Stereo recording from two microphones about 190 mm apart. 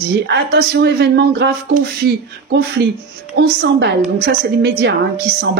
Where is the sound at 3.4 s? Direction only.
65° right (ahead or behind).